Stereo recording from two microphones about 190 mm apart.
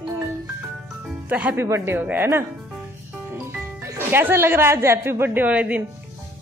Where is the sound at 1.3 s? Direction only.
10° right (ahead or behind).